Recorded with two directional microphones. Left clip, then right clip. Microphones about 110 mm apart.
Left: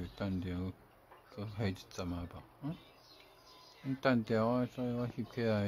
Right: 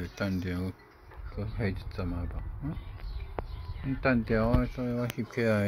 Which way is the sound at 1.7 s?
40° left (ahead or behind).